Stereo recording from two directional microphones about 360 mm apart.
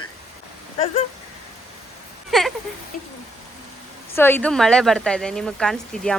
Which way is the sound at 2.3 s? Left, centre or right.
Centre.